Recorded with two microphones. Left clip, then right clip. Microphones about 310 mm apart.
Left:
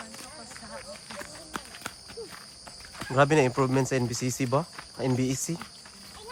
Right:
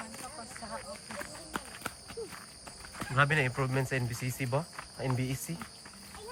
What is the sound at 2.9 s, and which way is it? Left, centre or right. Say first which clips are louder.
Speech: left 6 dB; centre.